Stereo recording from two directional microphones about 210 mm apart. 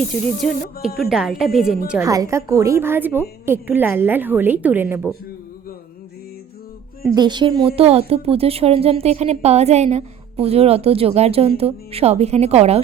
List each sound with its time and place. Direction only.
0.3 s speech: centre (ahead or behind)
1.9 s a woman's voice: 15° right (ahead or behind)
7.0 s a woman's voice: 20° right (ahead or behind)